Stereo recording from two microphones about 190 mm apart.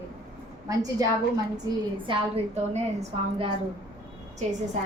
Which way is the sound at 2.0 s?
30° right (ahead or behind).